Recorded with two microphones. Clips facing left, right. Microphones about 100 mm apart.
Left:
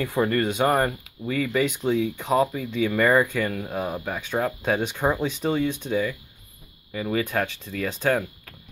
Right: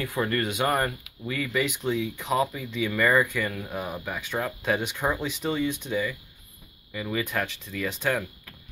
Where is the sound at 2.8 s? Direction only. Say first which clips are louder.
Left 3 dB; 20° left (ahead or behind).